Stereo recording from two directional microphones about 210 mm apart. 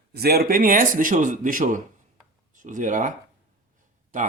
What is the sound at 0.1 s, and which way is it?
Speech, 50° right (ahead or behind).